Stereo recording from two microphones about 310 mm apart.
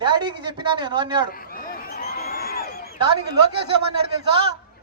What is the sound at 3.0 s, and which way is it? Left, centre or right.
Speech, centre.